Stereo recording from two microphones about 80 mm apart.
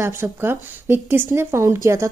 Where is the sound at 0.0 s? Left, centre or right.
Right.